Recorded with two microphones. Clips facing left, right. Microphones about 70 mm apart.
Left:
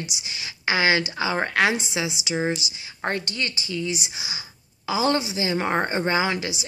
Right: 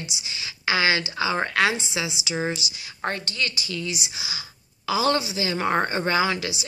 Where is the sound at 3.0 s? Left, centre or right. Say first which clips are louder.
Left 1 dB; left.